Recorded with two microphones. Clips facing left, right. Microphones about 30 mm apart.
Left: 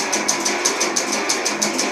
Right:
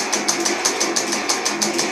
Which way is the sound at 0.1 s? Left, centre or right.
Centre.